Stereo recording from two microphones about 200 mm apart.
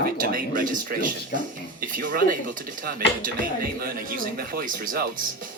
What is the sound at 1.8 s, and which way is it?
Speech, 45° right (ahead or behind).